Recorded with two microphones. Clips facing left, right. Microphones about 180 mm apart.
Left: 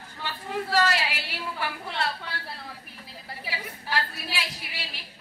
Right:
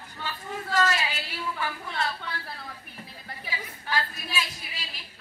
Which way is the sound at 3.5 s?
70° left (ahead or behind).